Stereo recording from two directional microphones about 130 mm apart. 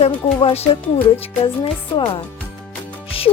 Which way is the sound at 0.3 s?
45° left (ahead or behind).